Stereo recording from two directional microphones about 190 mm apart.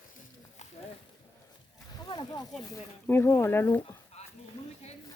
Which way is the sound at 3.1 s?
15° left (ahead or behind).